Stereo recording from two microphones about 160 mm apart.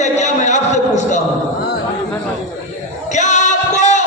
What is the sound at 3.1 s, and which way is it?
Music, 50° left (ahead or behind).